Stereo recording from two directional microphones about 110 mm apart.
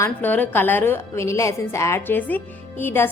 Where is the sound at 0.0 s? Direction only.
15° left (ahead or behind).